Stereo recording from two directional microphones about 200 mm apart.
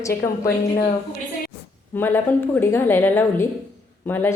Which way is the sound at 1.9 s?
10° left (ahead or behind).